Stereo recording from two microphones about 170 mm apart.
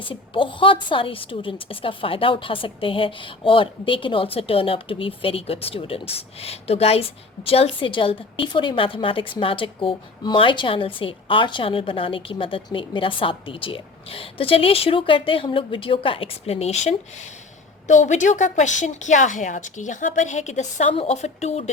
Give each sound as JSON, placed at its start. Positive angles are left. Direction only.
{"t": 0.0, "sound": "a woman's voice", "side_deg": 30}